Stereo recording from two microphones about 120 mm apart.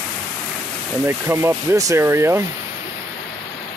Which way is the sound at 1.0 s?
20° right (ahead or behind).